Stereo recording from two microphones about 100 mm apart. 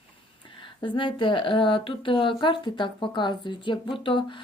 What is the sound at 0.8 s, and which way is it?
Speech, 55° left (ahead or behind).